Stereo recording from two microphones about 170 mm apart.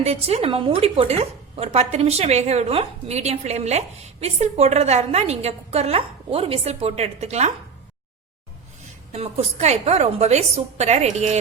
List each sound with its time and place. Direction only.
0.0 s a woman's voice: 35° right (ahead or behind)
9.1 s a woman's voice: 35° right (ahead or behind)